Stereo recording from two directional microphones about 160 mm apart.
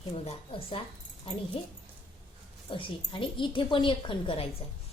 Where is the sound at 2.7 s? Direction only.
30° left (ahead or behind).